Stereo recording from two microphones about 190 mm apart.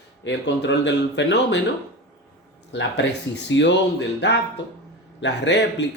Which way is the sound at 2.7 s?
65° left (ahead or behind).